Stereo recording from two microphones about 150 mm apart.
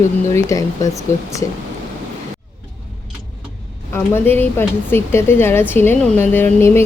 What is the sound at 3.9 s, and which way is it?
Speech, 15° left (ahead or behind).